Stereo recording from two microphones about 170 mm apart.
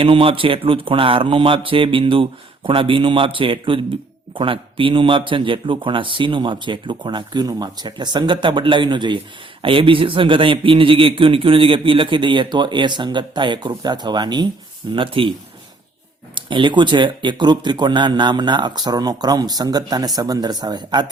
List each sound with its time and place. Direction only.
0.0 s speech: 30° right (ahead or behind)
16.3 s speech: 30° right (ahead or behind)